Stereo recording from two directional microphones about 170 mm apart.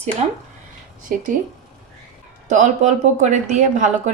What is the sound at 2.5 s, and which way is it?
A woman's voice, 45° right (ahead or behind).